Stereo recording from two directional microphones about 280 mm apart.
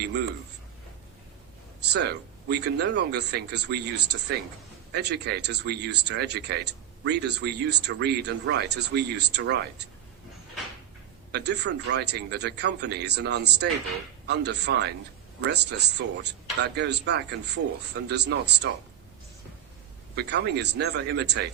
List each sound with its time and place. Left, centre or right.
0.0 s a man's voice: right
1.9 s a man's voice: right
11.3 s a man's voice: right
20.1 s a man's voice: right